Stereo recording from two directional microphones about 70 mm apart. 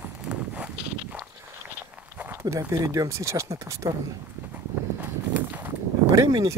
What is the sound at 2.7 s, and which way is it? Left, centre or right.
Speech, right.